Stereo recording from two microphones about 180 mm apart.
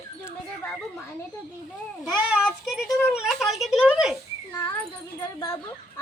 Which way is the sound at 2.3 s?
Centre (ahead or behind).